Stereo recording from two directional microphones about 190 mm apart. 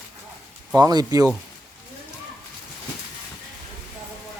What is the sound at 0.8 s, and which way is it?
Speech, 20° right (ahead or behind).